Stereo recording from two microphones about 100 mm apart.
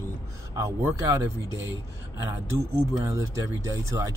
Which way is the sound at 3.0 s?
35° right (ahead or behind).